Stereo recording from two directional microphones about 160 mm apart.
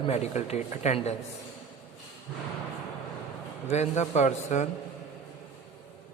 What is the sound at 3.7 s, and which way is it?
Speech, 45° left (ahead or behind).